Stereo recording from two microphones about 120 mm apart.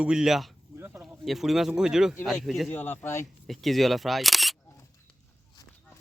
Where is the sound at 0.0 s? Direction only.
5° right (ahead or behind).